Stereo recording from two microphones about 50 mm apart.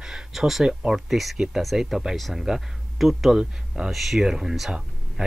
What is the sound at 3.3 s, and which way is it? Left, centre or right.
Speech, centre.